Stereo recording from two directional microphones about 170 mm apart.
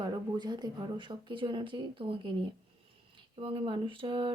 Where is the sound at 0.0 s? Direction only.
25° right (ahead or behind).